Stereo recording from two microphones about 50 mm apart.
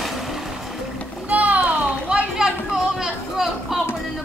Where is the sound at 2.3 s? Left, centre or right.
Centre.